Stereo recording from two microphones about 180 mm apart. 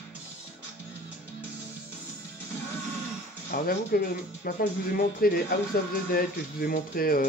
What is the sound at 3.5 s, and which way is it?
Speech, 55° left (ahead or behind).